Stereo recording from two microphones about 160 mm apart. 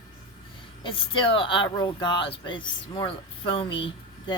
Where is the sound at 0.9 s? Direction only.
35° left (ahead or behind).